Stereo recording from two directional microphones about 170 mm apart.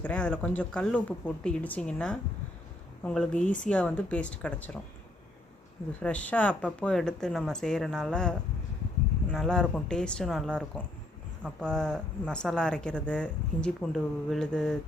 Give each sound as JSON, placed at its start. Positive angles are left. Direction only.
{"t": 0.0, "sound": "speech", "side_deg": 5}
{"t": 3.4, "sound": "speech", "side_deg": 50}
{"t": 3.7, "sound": "speech", "side_deg": 5}
{"t": 6.0, "sound": "speech", "side_deg": 5}